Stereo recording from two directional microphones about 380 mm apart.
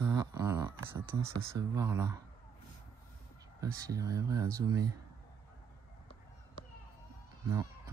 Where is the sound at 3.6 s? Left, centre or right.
Centre.